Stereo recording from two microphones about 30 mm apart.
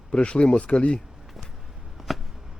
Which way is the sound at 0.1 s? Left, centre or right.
Left.